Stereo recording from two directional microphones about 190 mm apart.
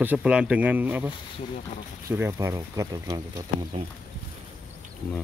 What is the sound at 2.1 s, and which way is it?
Speech, 15° right (ahead or behind).